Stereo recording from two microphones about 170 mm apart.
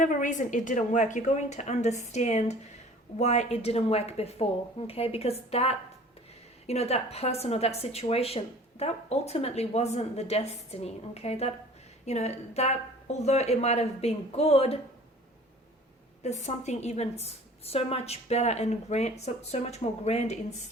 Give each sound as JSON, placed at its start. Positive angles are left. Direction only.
{"t": 0.0, "sound": "a woman's voice", "side_deg": 50}
{"t": 16.2, "sound": "speech", "side_deg": 40}